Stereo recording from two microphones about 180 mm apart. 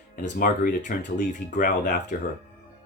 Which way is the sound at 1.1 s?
45° left (ahead or behind).